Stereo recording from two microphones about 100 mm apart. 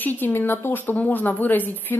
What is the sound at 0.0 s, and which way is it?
A woman's voice, 20° left (ahead or behind).